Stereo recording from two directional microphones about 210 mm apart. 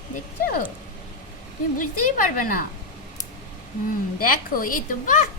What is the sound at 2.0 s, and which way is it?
Speech, 40° left (ahead or behind).